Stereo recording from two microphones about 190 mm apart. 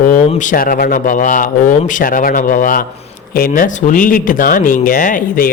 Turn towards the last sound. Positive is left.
turn(degrees=50)  # may be behind; listen again after turning